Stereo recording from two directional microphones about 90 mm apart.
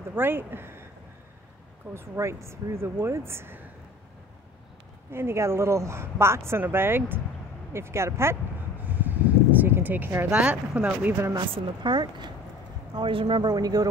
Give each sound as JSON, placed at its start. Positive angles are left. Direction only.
{"t": 0.1, "sound": "speech", "side_deg": -25}
{"t": 2.0, "sound": "speech", "side_deg": -30}
{"t": 5.1, "sound": "speech", "side_deg": -30}
{"t": 9.0, "sound": "a sound", "side_deg": -20}
{"t": 10.4, "sound": "speech", "side_deg": -15}
{"t": 11.5, "sound": "speech", "side_deg": -55}
{"t": 12.9, "sound": "speech", "side_deg": -70}
{"t": 13.4, "sound": "speech", "side_deg": -45}